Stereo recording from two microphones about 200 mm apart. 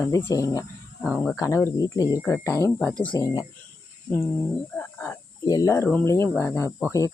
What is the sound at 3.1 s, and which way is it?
Speech, 20° left (ahead or behind).